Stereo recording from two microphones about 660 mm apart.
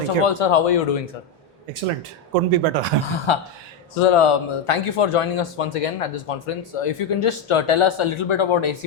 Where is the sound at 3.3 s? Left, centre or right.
Left.